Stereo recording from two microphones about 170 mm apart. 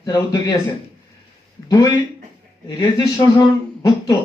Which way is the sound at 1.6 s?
25° left (ahead or behind).